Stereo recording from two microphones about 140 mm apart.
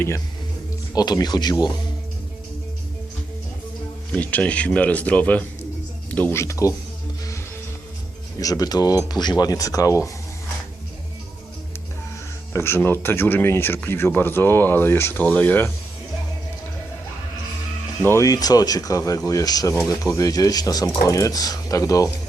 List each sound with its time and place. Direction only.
0.9 s speech: 30° left (ahead or behind)
4.1 s speech: 10° left (ahead or behind)
8.4 s speech: 25° left (ahead or behind)
12.5 s speech: 15° left (ahead or behind)
18.0 s speech: 20° left (ahead or behind)